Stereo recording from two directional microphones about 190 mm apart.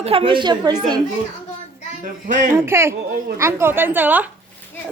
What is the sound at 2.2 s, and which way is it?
Speech, 45° right (ahead or behind).